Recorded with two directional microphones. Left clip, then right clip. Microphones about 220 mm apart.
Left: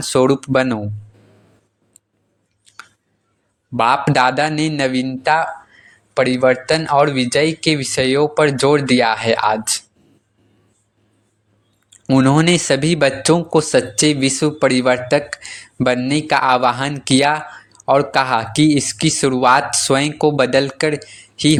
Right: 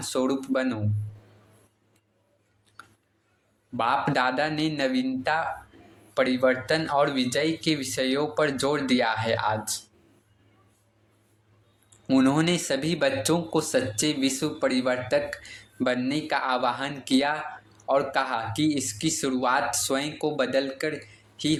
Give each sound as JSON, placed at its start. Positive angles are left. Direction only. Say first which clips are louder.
{"t": 0.0, "sound": "speech", "louder": "left 12 dB", "side_deg": 40}
{"t": 2.7, "sound": "a sound", "louder": "left 10 dB", "side_deg": 30}
{"t": 3.8, "sound": "speech", "louder": "left 10 dB", "side_deg": 35}
{"t": 12.0, "sound": "speech", "louder": "left 9 dB", "side_deg": 30}